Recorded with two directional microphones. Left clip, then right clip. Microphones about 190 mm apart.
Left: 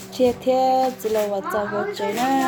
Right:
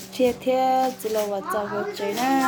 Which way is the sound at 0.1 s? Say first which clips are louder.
Left 3 dB; 5° left (ahead or behind).